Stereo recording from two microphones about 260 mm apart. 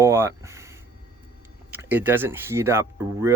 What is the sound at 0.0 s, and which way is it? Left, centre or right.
Speech, centre.